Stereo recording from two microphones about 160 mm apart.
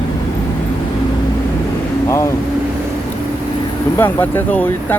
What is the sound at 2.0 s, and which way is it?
Speech, 20° left (ahead or behind).